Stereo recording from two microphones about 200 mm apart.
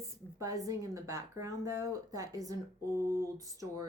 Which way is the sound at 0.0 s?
15° right (ahead or behind).